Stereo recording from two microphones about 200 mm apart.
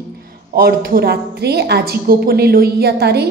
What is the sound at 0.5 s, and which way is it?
A woman's voice, 50° right (ahead or behind).